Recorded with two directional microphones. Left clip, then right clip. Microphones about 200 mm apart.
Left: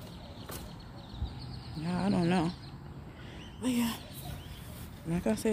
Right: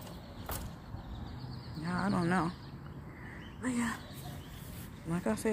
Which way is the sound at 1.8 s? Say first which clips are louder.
Left 2 dB; 25° left (ahead or behind).